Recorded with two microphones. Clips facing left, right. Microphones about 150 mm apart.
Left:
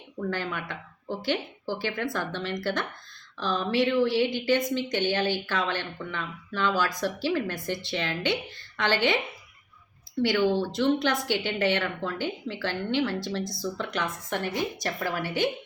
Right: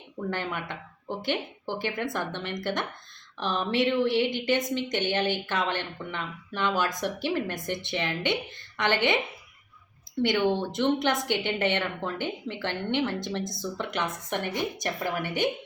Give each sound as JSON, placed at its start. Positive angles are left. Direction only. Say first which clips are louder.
{"t": 0.2, "sound": "a woman's voice", "louder": "left 1 dB", "side_deg": -20}
{"t": 10.5, "sound": "a woman's voice", "louder": "left 1 dB", "side_deg": -20}